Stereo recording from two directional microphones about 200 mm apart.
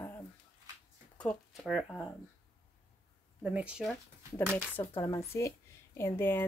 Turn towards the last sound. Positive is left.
turn(degrees=10)  # may be behind; listen again after turning